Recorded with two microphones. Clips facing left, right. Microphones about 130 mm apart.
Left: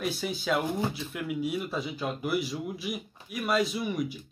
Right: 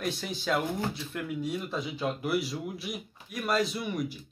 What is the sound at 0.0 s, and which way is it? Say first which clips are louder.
A child's voice: left 2 dB; 5° left (ahead or behind).